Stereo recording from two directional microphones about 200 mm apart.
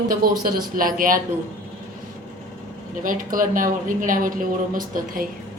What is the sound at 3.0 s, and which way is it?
Speech, 45° right (ahead or behind).